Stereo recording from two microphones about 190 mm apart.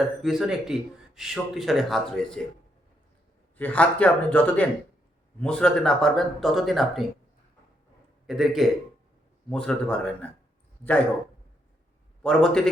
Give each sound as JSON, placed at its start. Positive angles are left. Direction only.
{"t": 0.0, "sound": "speech", "side_deg": 0}
{"t": 3.6, "sound": "a man's voice", "side_deg": 5}
{"t": 8.3, "sound": "speech", "side_deg": 0}
{"t": 12.2, "sound": "speech", "side_deg": 5}